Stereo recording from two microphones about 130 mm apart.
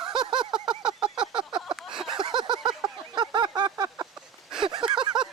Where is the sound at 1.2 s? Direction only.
35° right (ahead or behind).